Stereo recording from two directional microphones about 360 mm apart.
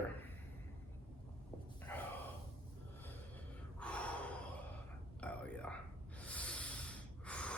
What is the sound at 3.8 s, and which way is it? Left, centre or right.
Gasp, centre.